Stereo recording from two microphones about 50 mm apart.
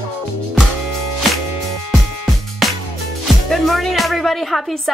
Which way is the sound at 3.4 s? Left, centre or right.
Centre.